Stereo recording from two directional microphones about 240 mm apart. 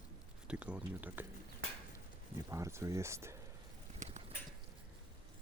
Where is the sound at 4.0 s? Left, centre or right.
Right.